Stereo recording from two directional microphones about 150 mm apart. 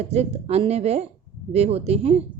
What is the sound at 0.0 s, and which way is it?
Speech, 45° right (ahead or behind).